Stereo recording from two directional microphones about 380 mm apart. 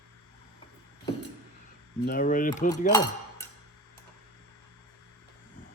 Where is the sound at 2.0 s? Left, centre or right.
Left.